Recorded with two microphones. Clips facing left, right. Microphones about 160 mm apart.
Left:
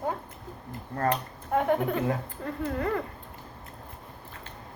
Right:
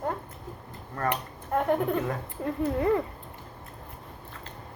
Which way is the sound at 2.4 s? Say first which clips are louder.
Right 4 dB; 20° right (ahead or behind).